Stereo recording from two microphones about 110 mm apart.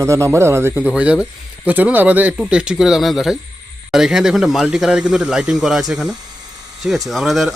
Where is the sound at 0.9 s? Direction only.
10° right (ahead or behind).